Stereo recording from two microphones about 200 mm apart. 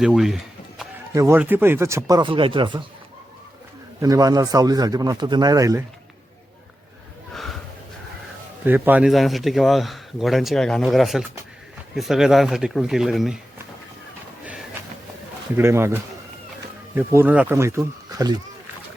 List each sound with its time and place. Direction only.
0.0 s a sound: centre (ahead or behind)
1.1 s speech: 15° right (ahead or behind)
4.0 s a man's voice: 20° right (ahead or behind)
8.6 s a man's voice: 10° right (ahead or behind)
15.5 s speech: 15° right (ahead or behind)